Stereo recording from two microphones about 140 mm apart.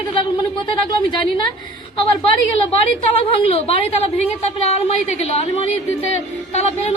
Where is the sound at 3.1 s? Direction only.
45° left (ahead or behind).